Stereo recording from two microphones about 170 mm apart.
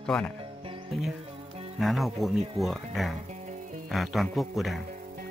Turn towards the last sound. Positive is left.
turn(degrees=0)  # may be behind; listen again after turning